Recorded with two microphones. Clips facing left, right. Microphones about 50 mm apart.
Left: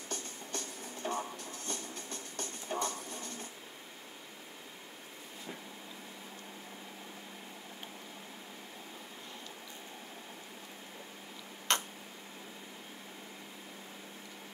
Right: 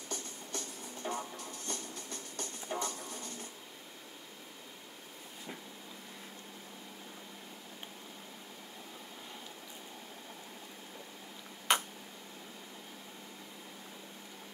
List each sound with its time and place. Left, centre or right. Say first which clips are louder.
0.1 s music: left 1 dB; left
11.7 s tick-tock: right 2 dB; centre